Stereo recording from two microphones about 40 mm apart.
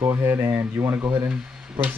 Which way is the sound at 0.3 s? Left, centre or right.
Right.